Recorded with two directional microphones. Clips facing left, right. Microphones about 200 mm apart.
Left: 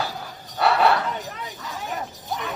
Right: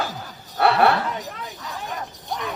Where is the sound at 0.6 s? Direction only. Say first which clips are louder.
Right 2 dB; 60° right (ahead or behind).